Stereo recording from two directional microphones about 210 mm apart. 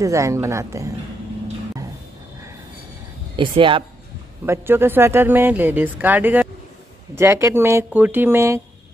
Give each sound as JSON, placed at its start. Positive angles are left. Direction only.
{"t": 0.0, "sound": "speech", "side_deg": -15}
{"t": 3.3, "sound": "speech", "side_deg": -25}
{"t": 4.5, "sound": "speech", "side_deg": -10}